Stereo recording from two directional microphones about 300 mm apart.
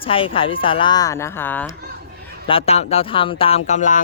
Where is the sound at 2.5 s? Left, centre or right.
Centre.